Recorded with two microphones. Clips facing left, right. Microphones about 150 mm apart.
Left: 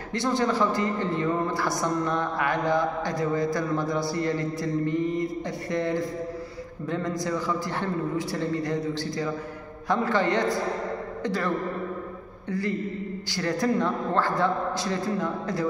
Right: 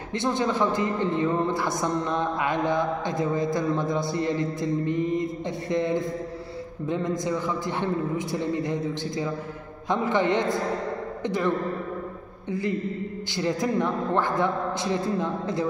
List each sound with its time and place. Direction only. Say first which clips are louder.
0.1 s a man's voice: even; 20° right (ahead or behind)